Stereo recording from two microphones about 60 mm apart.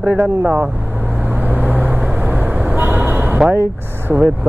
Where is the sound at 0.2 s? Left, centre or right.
Right.